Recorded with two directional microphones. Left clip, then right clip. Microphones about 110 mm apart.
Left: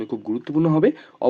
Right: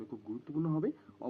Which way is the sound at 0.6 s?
35° left (ahead or behind).